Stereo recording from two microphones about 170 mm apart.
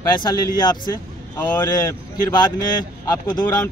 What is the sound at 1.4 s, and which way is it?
Speech, 10° left (ahead or behind).